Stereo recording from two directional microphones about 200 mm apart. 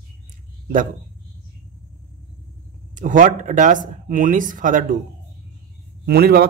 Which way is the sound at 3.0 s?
40° right (ahead or behind).